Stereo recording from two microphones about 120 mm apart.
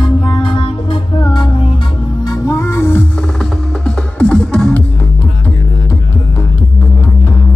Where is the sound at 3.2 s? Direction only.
5° left (ahead or behind).